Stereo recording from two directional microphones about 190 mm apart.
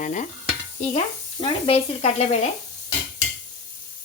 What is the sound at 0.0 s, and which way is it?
Stir, 40° left (ahead or behind).